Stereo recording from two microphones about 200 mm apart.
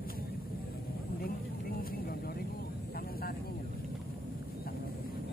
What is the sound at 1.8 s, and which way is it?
Vehicle, 50° left (ahead or behind).